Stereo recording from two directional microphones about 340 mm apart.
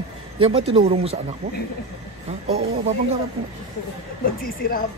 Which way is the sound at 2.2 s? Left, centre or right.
Centre.